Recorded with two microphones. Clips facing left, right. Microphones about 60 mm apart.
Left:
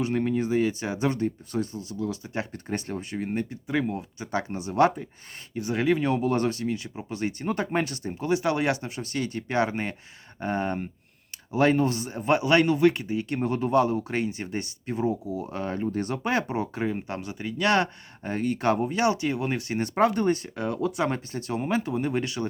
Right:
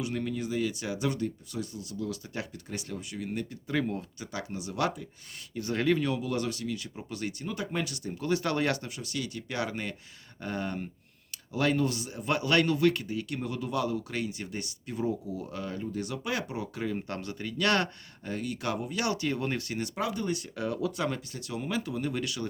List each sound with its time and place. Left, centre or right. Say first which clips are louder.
0.0 s speech: left 7 dB; left
2.5 s speech: left 7 dB; left
3.7 s speech: left 3 dB; centre
4.2 s speech: left 7 dB; left
5.5 s speech: left 3 dB; centre
6.0 s speech: left 6 dB; left
7.4 s speech: left 8 dB; left
8.2 s speech: left 4 dB; left
9.0 s speech: left 6 dB; left
20.0 s speech: left 11 dB; left